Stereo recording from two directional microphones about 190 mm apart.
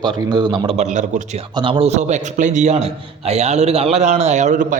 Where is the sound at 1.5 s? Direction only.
25° right (ahead or behind).